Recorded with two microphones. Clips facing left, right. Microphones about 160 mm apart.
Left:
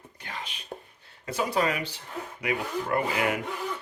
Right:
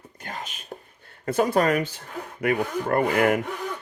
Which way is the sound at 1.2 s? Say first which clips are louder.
Right 6 dB; 50° right (ahead or behind).